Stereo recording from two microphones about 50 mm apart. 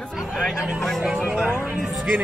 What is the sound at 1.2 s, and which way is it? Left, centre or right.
Speech, right.